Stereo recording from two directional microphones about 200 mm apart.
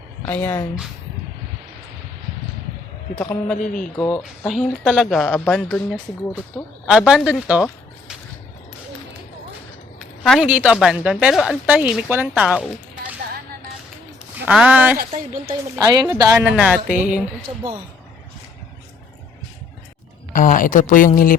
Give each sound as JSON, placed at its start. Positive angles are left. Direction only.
{"t": 0.3, "sound": "a man's voice", "side_deg": 10}
{"t": 3.2, "sound": "a man's voice", "side_deg": 10}
{"t": 10.0, "sound": "a woman's voice", "side_deg": 0}
{"t": 14.4, "sound": "a woman's voice", "side_deg": -5}
{"t": 14.9, "sound": "a woman's voice", "side_deg": -45}
{"t": 15.7, "sound": "a woman's voice", "side_deg": -15}
{"t": 20.3, "sound": "speech", "side_deg": 40}